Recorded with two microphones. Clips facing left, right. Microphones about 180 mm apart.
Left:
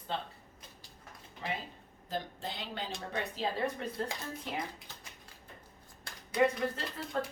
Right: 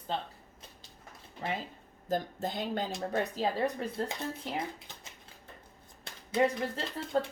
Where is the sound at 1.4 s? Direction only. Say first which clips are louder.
Right 3 dB; 45° right (ahead or behind).